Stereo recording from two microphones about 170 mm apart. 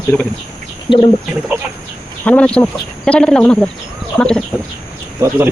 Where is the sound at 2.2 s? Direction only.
10° left (ahead or behind).